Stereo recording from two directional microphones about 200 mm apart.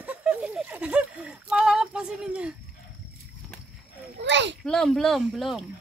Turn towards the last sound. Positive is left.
turn(degrees=0)  # may be behind; listen again after turning